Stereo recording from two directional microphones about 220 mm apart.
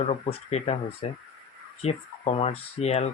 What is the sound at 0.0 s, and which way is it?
Speech, 30° left (ahead or behind).